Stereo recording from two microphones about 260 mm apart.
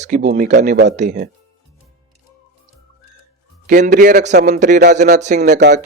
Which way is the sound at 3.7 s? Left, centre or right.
Right.